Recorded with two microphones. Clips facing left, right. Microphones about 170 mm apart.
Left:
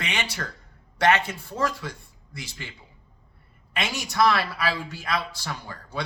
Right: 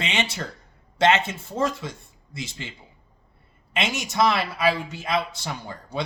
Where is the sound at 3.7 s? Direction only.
20° right (ahead or behind).